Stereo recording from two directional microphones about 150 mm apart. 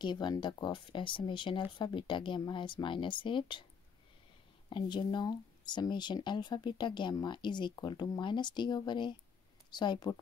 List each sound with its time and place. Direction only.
0.0 s speech: 30° left (ahead or behind)
4.6 s speech: 30° left (ahead or behind)